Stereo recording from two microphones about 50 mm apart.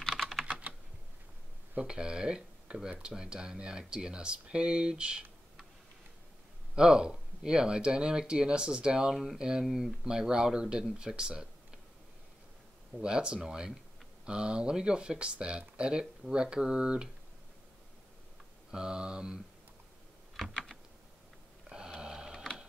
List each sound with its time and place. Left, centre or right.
0.0 s typing: centre
0.5 s typing: right
1.8 s speech: centre
6.7 s speech: centre
12.9 s speech: centre
18.7 s speech: centre
20.4 s typing: centre
21.6 s a sound: centre